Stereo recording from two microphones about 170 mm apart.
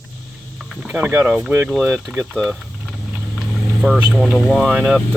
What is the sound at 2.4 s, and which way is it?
Vehicle, 5° right (ahead or behind).